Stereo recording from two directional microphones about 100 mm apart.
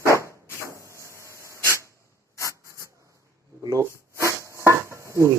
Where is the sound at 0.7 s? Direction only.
30° right (ahead or behind).